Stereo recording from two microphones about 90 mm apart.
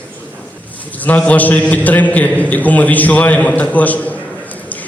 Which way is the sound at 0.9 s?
20° left (ahead or behind).